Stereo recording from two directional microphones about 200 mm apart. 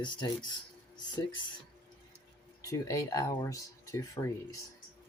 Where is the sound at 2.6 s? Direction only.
15° left (ahead or behind).